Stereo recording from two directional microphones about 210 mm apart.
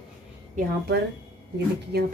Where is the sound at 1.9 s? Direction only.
50° right (ahead or behind).